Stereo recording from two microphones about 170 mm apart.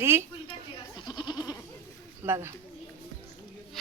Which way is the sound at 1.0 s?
25° left (ahead or behind).